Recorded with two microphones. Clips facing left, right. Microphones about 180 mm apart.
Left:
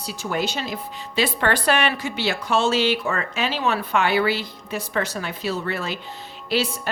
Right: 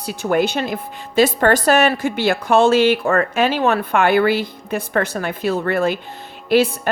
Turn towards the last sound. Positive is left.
turn(degrees=-55)  # may be behind; listen again after turning